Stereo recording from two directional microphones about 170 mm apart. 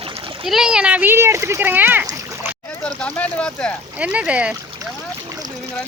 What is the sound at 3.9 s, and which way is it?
Speech, 5° right (ahead or behind).